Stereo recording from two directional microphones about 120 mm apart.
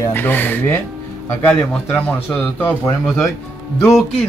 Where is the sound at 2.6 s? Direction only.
25° left (ahead or behind).